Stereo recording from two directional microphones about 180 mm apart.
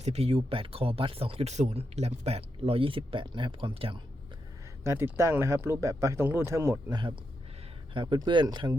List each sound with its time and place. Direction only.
0.0 s speech: 35° right (ahead or behind)
4.8 s speech: 15° right (ahead or behind)
7.9 s speech: 25° right (ahead or behind)